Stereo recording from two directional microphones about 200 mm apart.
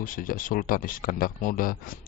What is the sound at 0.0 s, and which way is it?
Speech, 45° left (ahead or behind).